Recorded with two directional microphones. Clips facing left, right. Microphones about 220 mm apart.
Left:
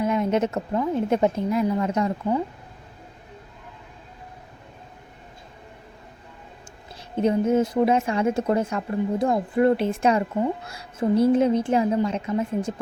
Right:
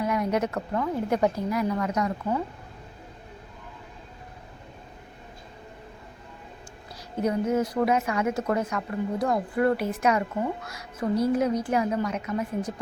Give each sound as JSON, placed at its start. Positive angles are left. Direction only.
{"t": 0.0, "sound": "a woman's voice", "side_deg": 25}
{"t": 7.2, "sound": "a woman's voice", "side_deg": 25}